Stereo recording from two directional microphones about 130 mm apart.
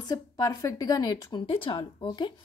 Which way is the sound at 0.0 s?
30° left (ahead or behind).